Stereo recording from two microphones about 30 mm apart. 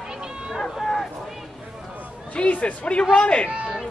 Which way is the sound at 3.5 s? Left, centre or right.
Right.